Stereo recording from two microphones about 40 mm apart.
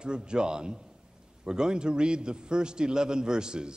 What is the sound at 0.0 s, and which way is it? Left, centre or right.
A man's voice, right.